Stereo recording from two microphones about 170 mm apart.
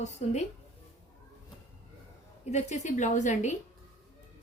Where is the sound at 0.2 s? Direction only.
45° left (ahead or behind).